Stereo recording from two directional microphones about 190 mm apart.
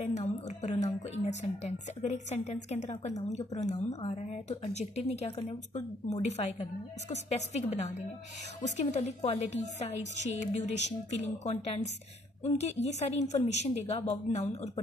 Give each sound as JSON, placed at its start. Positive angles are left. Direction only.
{"t": 0.0, "sound": "a woman's voice", "side_deg": 40}